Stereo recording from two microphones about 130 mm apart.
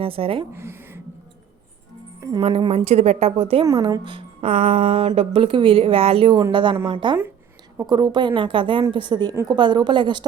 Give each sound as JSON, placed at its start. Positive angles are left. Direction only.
{"t": 0.0, "sound": "speech", "side_deg": -45}
{"t": 0.5, "sound": "a sound", "side_deg": -20}
{"t": 2.4, "sound": "speech", "side_deg": -45}
{"t": 3.8, "sound": "a woman's voice", "side_deg": -35}
{"t": 9.3, "sound": "a woman's voice", "side_deg": -20}
{"t": 9.6, "sound": "a woman's voice", "side_deg": -35}